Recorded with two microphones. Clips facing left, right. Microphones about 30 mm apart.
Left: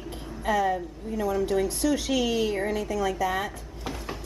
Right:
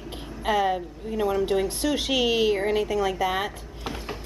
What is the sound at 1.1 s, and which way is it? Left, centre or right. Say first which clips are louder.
A woman's voice: right 2 dB; right.